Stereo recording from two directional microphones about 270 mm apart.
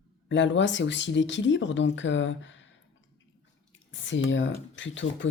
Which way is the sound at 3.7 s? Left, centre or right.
Left.